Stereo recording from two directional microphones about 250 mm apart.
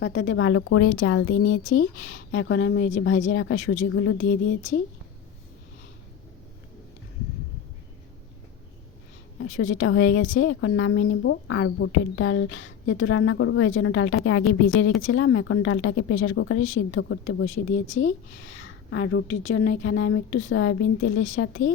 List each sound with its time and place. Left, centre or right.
0.0 s a woman's voice: left
9.4 s a woman's voice: left